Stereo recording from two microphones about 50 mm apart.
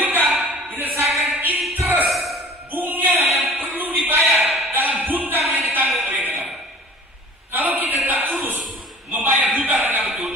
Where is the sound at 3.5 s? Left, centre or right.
Right.